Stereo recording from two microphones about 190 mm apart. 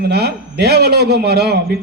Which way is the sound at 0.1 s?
55° right (ahead or behind).